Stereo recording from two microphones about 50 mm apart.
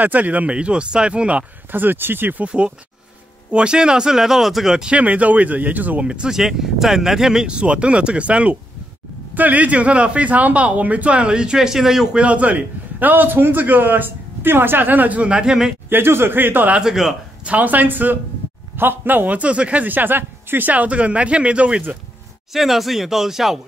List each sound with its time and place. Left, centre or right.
0.0 s speech: right
1.7 s speech: right
2.4 s speech: right; by 4.7 s centre
4.7 s speech: right
6.0 s speech: centre
9.3 s speech: right; by 12.2 s centre
12.2 s a man's voice: right
15.9 s speech: right
16.8 s speech: centre
17.4 s a man's voice: right
20.7 s speech: right
22.5 s speech: centre